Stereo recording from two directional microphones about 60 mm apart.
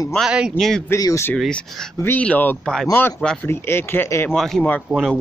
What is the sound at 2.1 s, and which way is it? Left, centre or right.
Speech, left.